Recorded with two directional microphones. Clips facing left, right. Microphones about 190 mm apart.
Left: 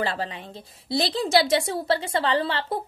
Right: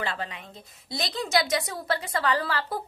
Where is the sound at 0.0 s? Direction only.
35° left (ahead or behind).